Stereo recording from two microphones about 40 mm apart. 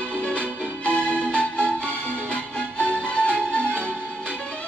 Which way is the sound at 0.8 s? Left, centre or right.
Left.